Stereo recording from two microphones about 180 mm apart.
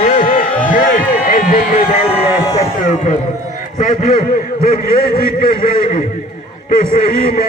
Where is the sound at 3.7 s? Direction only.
45° left (ahead or behind).